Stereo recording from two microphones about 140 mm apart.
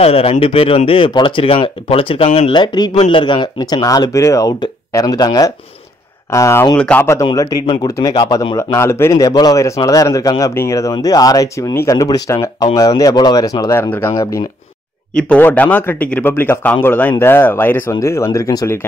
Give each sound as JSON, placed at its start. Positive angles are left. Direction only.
{"t": 0.0, "sound": "speech", "side_deg": 45}
{"t": 6.8, "sound": "speech", "side_deg": 10}
{"t": 7.3, "sound": "speech", "side_deg": 30}
{"t": 15.1, "sound": "speech", "side_deg": 10}